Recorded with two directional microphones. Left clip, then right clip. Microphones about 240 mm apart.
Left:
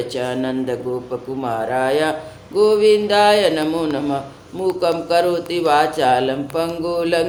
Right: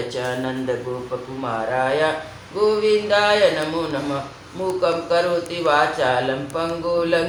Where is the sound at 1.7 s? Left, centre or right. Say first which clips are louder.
Left 1 dB; left.